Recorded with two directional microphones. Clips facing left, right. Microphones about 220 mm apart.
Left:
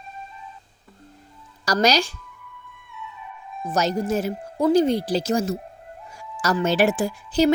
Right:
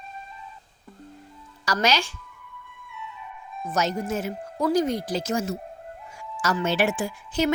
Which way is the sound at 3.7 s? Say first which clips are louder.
Left 4 dB; 35° left (ahead or behind).